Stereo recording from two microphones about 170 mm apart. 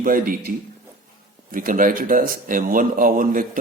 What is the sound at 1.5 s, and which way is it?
Speech, 50° right (ahead or behind).